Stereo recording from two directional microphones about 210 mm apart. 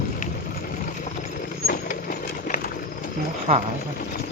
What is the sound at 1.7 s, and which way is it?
Vehicle, 45° left (ahead or behind).